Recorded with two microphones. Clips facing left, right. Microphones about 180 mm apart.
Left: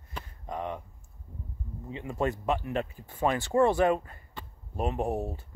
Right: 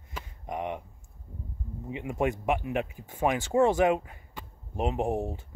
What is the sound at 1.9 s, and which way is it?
Speech, 15° right (ahead or behind).